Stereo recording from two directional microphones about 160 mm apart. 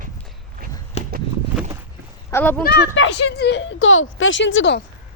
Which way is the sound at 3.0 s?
90° left.